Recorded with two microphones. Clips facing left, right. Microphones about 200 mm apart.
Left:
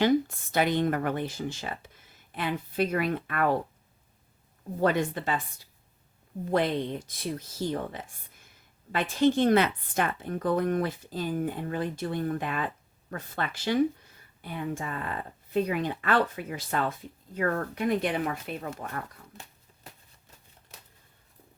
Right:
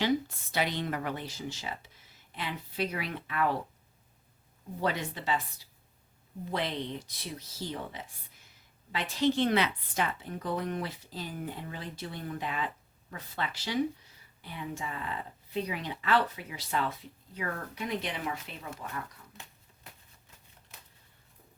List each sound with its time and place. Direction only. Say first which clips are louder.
0.0 s speech: left 5 dB; 50° left (ahead or behind)
4.8 s speech: left 7 dB; 50° left (ahead or behind)
6.5 s speech: left 7 dB; 50° left (ahead or behind)